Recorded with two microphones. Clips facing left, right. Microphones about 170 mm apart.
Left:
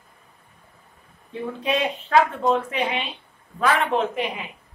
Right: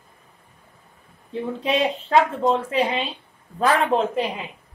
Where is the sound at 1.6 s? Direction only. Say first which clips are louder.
Right 2 dB; 25° right (ahead or behind).